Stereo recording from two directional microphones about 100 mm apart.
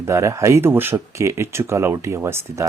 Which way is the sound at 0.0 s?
30° right (ahead or behind).